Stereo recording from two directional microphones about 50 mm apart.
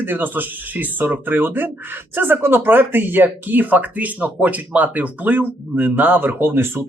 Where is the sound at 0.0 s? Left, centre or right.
Right.